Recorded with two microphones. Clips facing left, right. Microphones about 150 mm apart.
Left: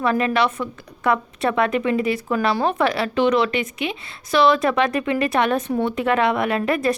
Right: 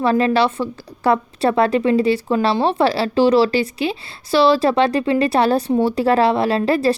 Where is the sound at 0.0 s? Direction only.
30° right (ahead or behind).